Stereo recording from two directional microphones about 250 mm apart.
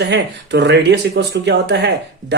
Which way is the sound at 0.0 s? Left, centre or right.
Right.